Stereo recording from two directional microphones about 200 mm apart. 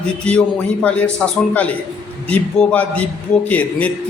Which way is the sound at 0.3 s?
5° left (ahead or behind).